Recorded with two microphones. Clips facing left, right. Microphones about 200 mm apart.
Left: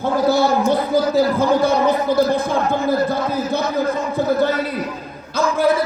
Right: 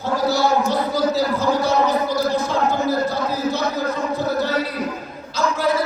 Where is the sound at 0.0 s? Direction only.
55° left (ahead or behind).